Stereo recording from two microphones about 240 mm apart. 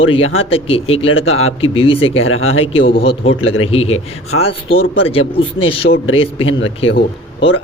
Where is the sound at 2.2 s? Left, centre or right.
Left.